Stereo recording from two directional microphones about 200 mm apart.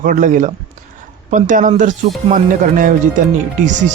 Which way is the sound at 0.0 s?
40° right (ahead or behind).